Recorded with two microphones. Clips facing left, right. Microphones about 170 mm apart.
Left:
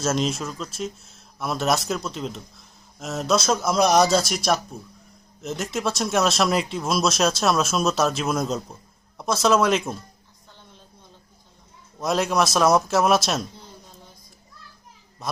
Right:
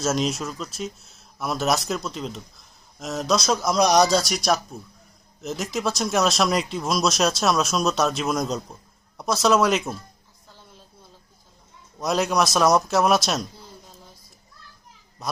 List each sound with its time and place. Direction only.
0.0 s speech: centre (ahead or behind)
11.9 s speech: centre (ahead or behind)
15.2 s speech: centre (ahead or behind)